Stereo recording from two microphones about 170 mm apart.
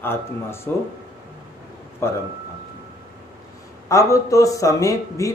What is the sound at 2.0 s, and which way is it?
Speech, 15° left (ahead or behind).